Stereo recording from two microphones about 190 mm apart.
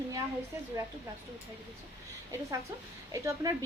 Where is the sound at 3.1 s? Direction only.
15° right (ahead or behind).